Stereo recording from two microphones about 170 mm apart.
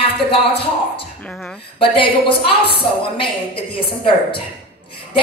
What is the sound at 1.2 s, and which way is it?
Speech, 5° left (ahead or behind).